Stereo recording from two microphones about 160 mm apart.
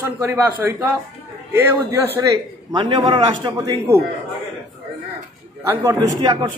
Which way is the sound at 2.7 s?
25° right (ahead or behind).